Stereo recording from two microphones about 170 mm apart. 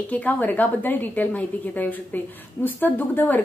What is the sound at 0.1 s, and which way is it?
A woman's voice, 10° left (ahead or behind).